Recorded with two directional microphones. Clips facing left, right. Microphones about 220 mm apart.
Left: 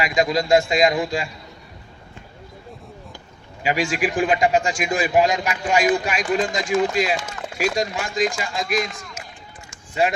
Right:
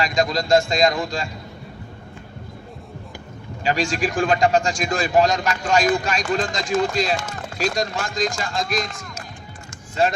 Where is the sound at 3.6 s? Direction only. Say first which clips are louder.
Even; 15° left (ahead or behind).